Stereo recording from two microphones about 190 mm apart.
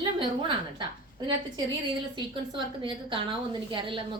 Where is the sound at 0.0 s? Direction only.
25° right (ahead or behind).